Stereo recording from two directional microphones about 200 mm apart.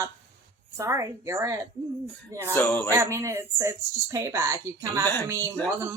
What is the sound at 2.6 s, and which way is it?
Speech, 10° left (ahead or behind).